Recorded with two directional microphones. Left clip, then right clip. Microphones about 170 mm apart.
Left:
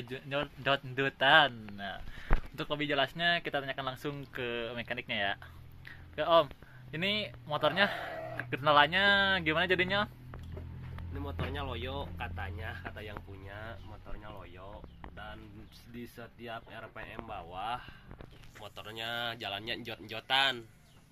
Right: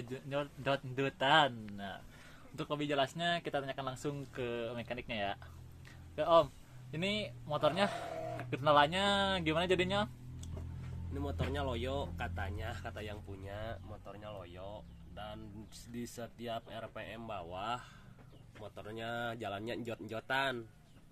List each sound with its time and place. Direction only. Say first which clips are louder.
0.1 s speech: left 3 dB; centre (ahead or behind)
11.5 s speech: right 3 dB; 90° right
15.9 s speech: right 2 dB; 90° right
18.8 s speech: left 3 dB; 50° right (ahead or behind)